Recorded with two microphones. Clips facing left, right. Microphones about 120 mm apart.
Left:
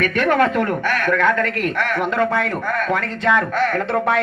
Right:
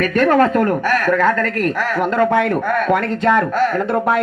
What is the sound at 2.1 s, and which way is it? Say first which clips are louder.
Speech: right 5 dB; 55° right (ahead or behind).